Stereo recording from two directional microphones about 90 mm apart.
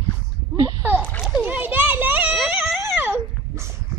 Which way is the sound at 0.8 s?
20° right (ahead or behind).